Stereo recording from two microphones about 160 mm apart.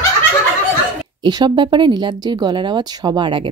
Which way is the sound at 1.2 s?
25° right (ahead or behind).